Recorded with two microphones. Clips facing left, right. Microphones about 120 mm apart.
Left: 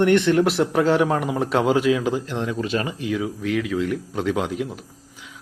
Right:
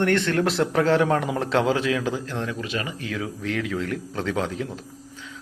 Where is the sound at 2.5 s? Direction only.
35° left (ahead or behind).